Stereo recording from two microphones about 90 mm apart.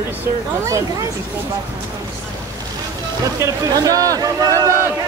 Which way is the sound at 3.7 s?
40° right (ahead or behind).